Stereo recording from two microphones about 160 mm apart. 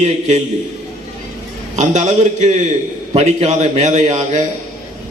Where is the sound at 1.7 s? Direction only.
45° right (ahead or behind).